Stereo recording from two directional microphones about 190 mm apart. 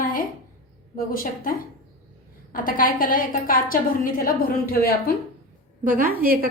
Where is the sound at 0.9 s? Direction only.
50° left (ahead or behind).